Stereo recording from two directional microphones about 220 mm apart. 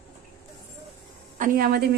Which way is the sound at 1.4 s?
40° right (ahead or behind).